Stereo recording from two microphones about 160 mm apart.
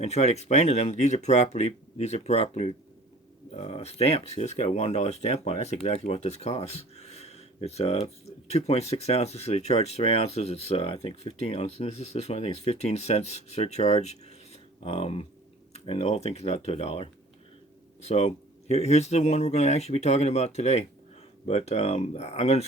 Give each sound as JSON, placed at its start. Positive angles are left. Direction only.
{"t": 0.0, "sound": "speech", "side_deg": 45}